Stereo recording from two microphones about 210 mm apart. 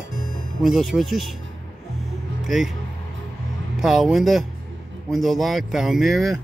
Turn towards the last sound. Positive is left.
turn(degrees=0)  # may be behind; listen again after turning